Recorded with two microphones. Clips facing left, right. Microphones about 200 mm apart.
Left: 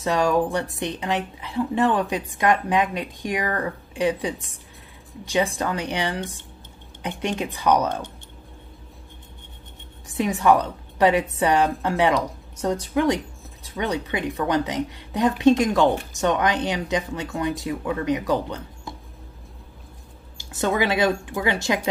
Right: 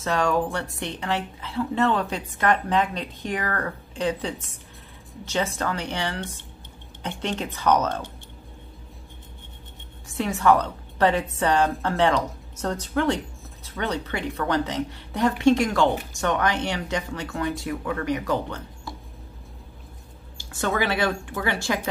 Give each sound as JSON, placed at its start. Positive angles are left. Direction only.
{"t": 0.0, "sound": "a woman's voice", "side_deg": 15}
{"t": 10.1, "sound": "a woman's voice", "side_deg": 15}
{"t": 20.3, "sound": "a woman's voice", "side_deg": 15}